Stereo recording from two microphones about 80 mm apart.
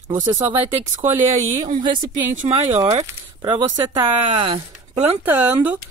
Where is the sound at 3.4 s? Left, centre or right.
Right.